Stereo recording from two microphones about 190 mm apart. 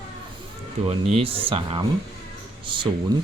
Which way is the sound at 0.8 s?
30° right (ahead or behind).